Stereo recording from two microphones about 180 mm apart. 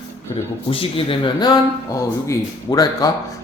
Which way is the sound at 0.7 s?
30° left (ahead or behind).